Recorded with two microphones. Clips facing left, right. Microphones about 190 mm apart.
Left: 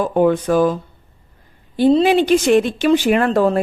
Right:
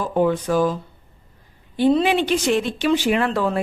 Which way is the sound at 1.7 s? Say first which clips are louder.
Left 4 dB; 35° left (ahead or behind).